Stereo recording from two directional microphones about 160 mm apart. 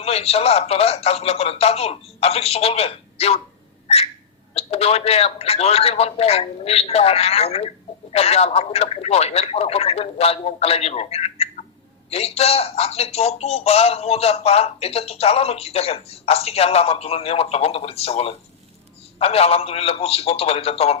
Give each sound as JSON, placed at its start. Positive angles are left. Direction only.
{"t": 0.0, "sound": "speech", "side_deg": 40}
{"t": 3.8, "sound": "a sound", "side_deg": 40}
{"t": 4.5, "sound": "speech", "side_deg": 40}